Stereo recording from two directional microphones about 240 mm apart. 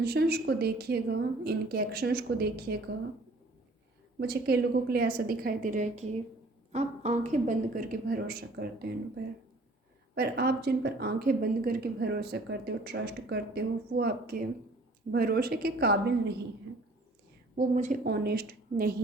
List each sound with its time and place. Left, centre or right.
0.0 s a woman's voice: right
4.2 s a woman's voice: right
17.6 s a woman's voice: right